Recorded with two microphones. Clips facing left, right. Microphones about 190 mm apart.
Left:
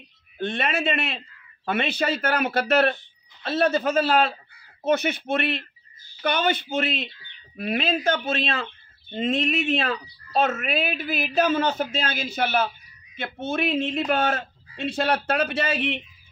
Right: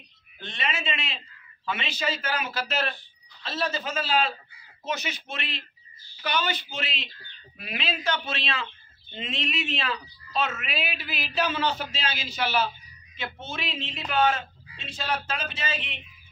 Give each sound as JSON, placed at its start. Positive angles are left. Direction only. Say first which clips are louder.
{"t": 0.4, "sound": "a man's voice", "louder": "left 8 dB", "side_deg": 55}